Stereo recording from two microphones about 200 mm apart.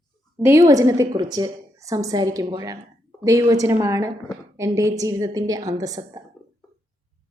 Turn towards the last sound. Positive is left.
turn(degrees=-20)  # may be behind; listen again after turning